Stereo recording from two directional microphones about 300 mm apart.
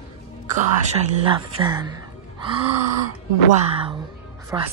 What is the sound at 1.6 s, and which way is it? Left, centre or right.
Speech, centre.